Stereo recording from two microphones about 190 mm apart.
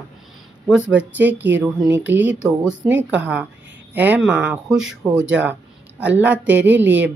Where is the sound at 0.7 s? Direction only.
5° right (ahead or behind).